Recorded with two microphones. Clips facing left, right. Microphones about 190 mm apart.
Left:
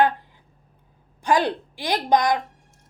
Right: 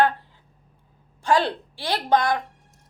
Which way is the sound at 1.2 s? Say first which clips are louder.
Even; 15° left (ahead or behind).